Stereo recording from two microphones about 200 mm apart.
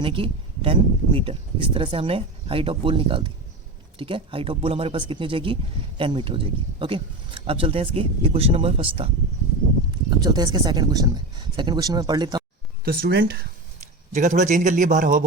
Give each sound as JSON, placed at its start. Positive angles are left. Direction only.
{"t": 0.0, "sound": "speech", "side_deg": -25}
{"t": 12.8, "sound": "speech", "side_deg": -50}
{"t": 14.1, "sound": "a man's voice", "side_deg": -35}